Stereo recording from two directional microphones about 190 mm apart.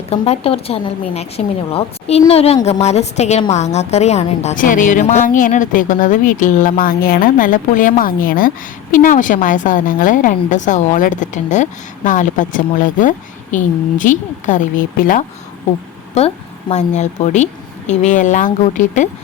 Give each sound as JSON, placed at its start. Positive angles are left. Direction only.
{"t": 0.1, "sound": "a woman's voice", "side_deg": 30}
{"t": 16.1, "sound": "a woman's voice", "side_deg": 30}